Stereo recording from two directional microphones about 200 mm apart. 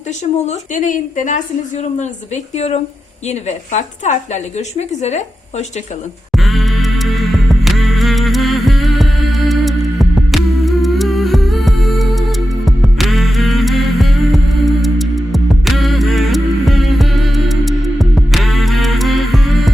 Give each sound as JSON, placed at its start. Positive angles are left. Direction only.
{"t": 0.4, "sound": "a woman's voice", "side_deg": 40}
{"t": 6.3, "sound": "music", "side_deg": 0}